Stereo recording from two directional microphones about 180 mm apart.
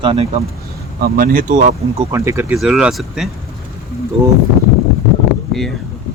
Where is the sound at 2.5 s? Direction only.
5° right (ahead or behind).